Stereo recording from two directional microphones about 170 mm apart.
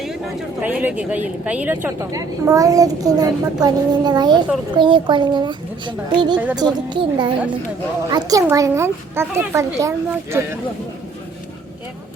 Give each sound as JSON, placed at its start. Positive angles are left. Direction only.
{"t": 0.6, "sound": "a woman's voice", "side_deg": -10}
{"t": 6.3, "sound": "speech", "side_deg": -10}
{"t": 6.6, "sound": "a woman's voice", "side_deg": -25}